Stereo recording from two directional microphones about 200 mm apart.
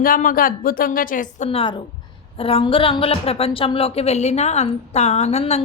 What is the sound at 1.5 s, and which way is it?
A woman's voice, 25° left (ahead or behind).